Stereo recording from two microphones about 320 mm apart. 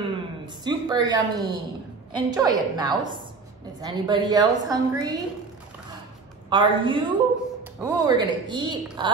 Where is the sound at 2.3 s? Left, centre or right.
Centre.